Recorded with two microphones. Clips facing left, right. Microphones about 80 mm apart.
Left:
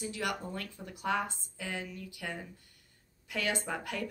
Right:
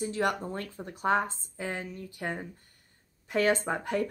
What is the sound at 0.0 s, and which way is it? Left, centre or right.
Speech, right.